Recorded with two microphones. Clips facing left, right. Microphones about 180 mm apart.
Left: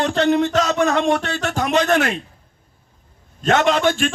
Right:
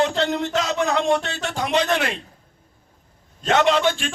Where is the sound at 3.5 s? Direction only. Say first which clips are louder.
Left 1 dB; 50° left (ahead or behind).